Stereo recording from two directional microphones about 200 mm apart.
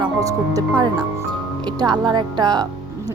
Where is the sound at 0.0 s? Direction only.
15° right (ahead or behind).